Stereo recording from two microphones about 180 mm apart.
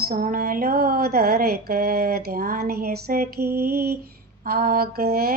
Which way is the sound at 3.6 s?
60° right (ahead or behind).